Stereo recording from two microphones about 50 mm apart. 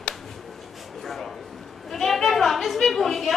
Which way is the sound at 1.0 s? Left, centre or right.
Centre.